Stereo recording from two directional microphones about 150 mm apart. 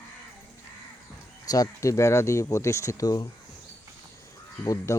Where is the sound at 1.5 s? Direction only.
20° left (ahead or behind).